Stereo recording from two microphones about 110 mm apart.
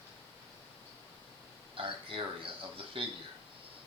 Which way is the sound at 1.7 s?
55° right (ahead or behind).